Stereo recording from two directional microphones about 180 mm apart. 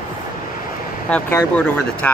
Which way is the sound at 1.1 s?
5° left (ahead or behind).